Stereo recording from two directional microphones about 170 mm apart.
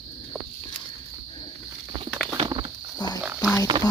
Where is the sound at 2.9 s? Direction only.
25° left (ahead or behind).